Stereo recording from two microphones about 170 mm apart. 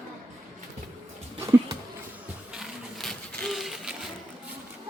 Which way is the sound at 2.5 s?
Centre (ahead or behind).